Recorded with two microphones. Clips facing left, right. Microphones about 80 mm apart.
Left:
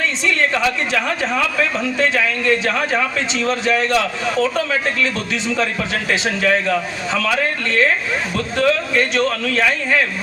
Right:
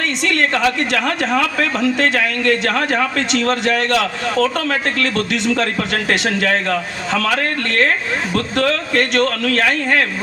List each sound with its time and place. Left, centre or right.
0.3 s speech: right